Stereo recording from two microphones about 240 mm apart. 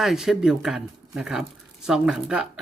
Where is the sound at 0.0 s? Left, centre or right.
Centre.